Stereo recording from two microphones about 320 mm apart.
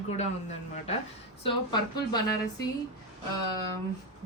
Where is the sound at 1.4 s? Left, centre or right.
Centre.